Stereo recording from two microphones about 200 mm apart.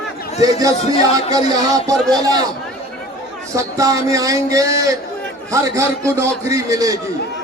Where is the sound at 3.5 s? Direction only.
15° right (ahead or behind).